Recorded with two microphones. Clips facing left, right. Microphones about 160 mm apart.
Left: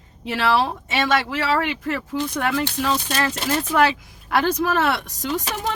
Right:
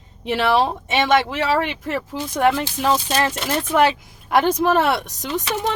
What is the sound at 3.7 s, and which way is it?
Speech, 20° right (ahead or behind).